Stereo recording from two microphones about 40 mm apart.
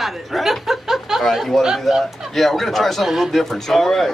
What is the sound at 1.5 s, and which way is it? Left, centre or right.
A man's voice, centre.